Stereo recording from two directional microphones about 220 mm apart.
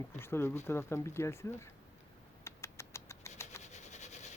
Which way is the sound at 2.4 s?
10° left (ahead or behind).